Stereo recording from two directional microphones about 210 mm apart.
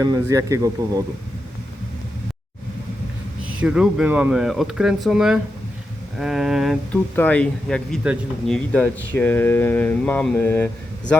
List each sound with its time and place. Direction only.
0.0 s a man's voice: 15° right (ahead or behind)
3.4 s speech: 5° right (ahead or behind); by 10.7 s 10° left (ahead or behind)